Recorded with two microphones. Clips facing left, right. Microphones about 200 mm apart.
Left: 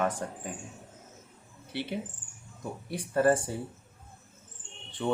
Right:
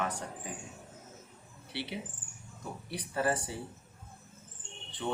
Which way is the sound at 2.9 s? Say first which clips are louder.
Left 7 dB; 50° left (ahead or behind).